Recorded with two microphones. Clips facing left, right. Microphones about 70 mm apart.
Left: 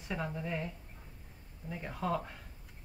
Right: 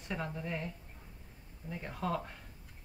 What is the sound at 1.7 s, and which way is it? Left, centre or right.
Speech, centre.